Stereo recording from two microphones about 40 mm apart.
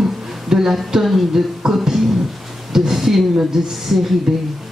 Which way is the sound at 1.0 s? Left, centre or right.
Centre.